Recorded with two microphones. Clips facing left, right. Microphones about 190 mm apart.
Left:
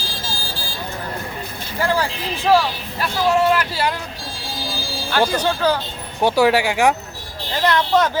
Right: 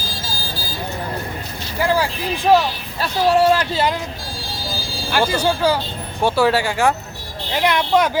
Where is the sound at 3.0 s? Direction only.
30° right (ahead or behind).